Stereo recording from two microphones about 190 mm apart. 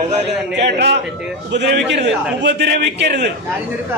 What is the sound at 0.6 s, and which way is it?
A man's voice, 65° right (ahead or behind).